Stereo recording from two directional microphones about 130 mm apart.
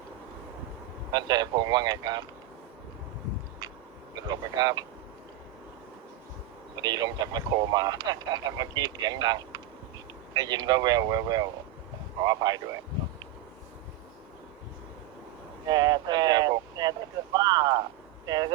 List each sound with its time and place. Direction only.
1.1 s speech: 35° right (ahead or behind)
3.6 s a sound: 30° right (ahead or behind)
4.1 s speech: 35° right (ahead or behind)
6.7 s speech: 30° right (ahead or behind)
15.7 s speech: 30° right (ahead or behind)